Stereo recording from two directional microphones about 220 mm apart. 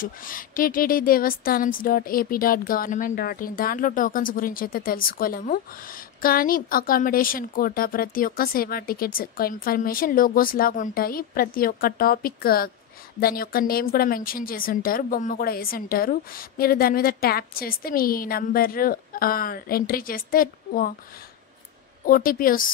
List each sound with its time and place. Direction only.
0.0 s a woman's voice: 40° left (ahead or behind)
22.0 s a woman's voice: 40° left (ahead or behind)